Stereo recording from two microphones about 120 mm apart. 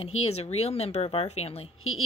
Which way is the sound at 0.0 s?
60° left (ahead or behind).